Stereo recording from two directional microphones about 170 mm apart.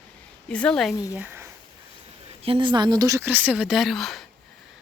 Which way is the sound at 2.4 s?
30° right (ahead or behind).